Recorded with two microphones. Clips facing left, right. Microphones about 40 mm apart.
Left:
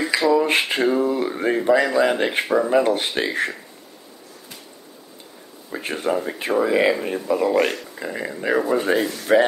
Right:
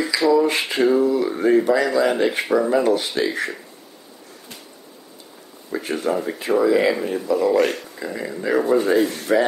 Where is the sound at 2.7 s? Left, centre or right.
Left.